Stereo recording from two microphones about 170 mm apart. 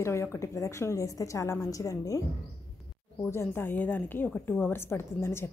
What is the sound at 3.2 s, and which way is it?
A woman's voice, 15° left (ahead or behind).